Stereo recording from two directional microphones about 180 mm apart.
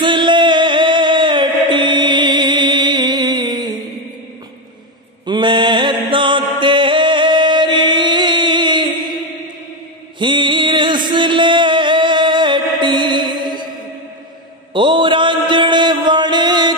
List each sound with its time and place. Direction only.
0.0 s chant: 25° right (ahead or behind)
5.2 s mantra: 25° right (ahead or behind)
10.1 s music: 25° right (ahead or behind)
14.7 s mantra: 25° right (ahead or behind)